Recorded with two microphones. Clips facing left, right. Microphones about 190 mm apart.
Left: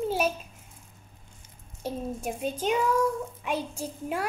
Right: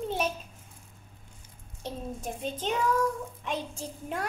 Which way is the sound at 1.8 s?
10° left (ahead or behind).